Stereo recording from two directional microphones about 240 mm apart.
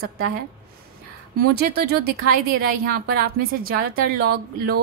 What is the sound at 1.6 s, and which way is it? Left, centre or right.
A woman's voice, right.